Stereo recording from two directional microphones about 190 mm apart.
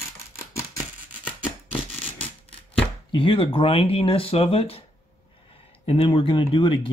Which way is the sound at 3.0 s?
25° left (ahead or behind).